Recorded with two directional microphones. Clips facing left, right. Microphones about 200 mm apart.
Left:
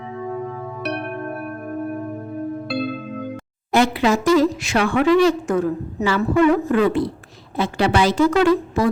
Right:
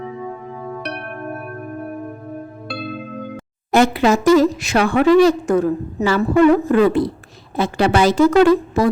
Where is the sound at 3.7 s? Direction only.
45° right (ahead or behind).